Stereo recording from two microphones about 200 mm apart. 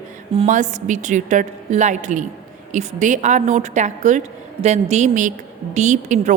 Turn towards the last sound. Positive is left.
turn(degrees=-35)  # may be behind; listen again after turning